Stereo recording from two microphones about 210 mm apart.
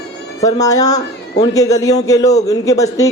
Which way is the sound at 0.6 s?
15° left (ahead or behind).